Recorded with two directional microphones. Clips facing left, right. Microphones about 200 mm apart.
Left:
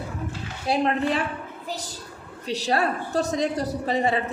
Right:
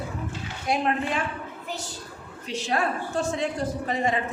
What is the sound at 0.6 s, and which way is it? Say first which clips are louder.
Speech: left 3 dB; 35° left (ahead or behind).